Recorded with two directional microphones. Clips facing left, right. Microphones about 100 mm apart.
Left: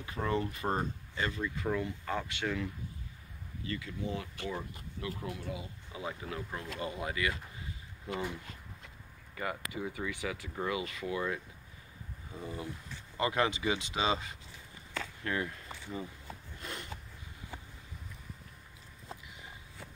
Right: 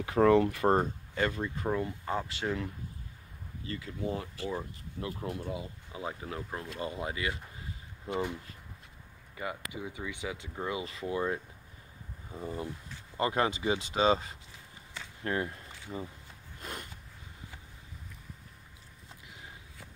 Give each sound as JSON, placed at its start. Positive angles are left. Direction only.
{"t": 0.0, "sound": "speech", "side_deg": -75}
{"t": 1.4, "sound": "speech", "side_deg": -35}
{"t": 4.4, "sound": "speech", "side_deg": -25}
{"t": 9.3, "sound": "speech", "side_deg": -15}